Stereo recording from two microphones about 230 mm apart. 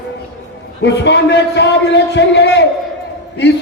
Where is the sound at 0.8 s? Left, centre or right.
Left.